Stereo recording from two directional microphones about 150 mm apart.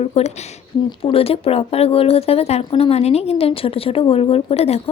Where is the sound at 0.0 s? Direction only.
45° left (ahead or behind).